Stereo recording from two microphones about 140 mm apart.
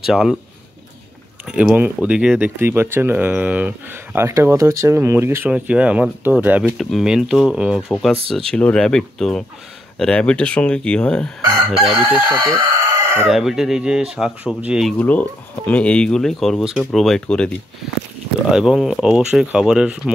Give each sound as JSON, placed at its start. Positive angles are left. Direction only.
{"t": 0.0, "sound": "speech", "side_deg": 0}
{"t": 1.4, "sound": "speech", "side_deg": -5}
{"t": 6.8, "sound": "speech", "side_deg": 0}
{"t": 9.9, "sound": "chicken", "side_deg": 5}
{"t": 12.7, "sound": "chicken", "side_deg": -20}
{"t": 13.3, "sound": "speech", "side_deg": 0}
{"t": 15.0, "sound": "chicken", "side_deg": 10}
{"t": 16.9, "sound": "speech", "side_deg": 0}
{"t": 18.5, "sound": "speech", "side_deg": -5}